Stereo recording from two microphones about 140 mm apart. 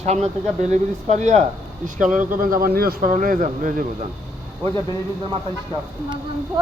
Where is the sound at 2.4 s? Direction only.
90° right; by 3.8 s 70° right (ahead or behind).